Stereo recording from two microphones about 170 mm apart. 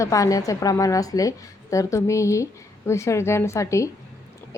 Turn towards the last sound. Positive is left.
turn(degrees=15)  # may be behind; listen again after turning